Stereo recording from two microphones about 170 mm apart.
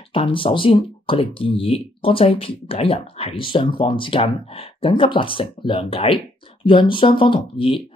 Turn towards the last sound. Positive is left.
turn(degrees=30)  # may be behind; listen again after turning